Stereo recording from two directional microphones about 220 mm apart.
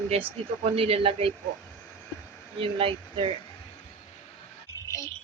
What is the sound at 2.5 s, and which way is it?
Speech, 25° right (ahead or behind).